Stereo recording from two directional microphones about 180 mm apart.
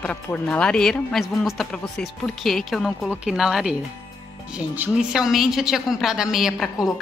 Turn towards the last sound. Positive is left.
turn(degrees=0)  # may be behind; listen again after turning